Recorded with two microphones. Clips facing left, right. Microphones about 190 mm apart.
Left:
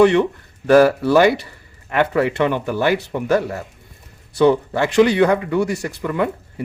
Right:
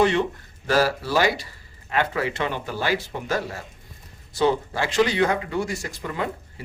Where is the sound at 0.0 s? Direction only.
65° left (ahead or behind).